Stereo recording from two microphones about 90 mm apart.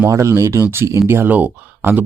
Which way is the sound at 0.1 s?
35° right (ahead or behind).